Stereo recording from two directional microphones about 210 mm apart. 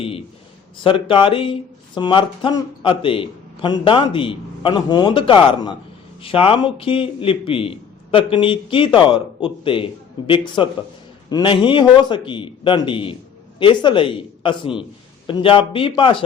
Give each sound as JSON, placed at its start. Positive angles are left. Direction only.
{"t": 0.0, "sound": "a man's voice", "side_deg": 25}